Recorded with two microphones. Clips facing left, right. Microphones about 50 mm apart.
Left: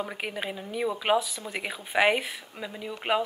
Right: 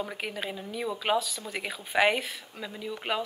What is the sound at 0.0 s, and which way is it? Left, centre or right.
Speech, centre.